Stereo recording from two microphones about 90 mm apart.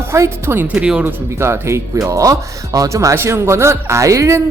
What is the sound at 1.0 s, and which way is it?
Speech, 25° right (ahead or behind).